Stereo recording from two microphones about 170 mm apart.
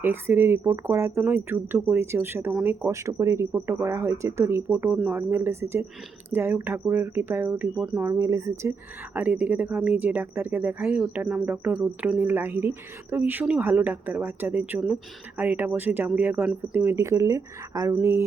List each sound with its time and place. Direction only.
0.0 s speech: 15° right (ahead or behind)